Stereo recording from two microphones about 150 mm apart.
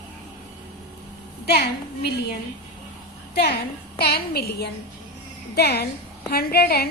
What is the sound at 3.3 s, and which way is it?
A woman's voice, 90° left.